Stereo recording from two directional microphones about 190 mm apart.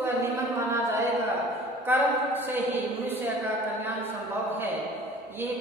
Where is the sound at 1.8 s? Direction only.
10° right (ahead or behind).